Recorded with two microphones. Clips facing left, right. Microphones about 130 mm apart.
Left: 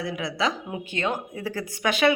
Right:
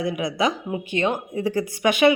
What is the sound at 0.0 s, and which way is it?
Speech, 15° right (ahead or behind).